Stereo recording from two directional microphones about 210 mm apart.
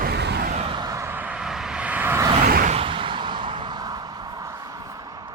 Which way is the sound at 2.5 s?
40° right (ahead or behind).